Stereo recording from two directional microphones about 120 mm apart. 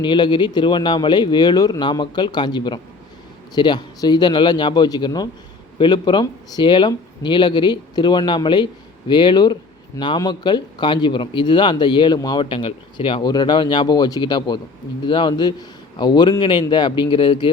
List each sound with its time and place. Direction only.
0.0 s speech: 40° left (ahead or behind)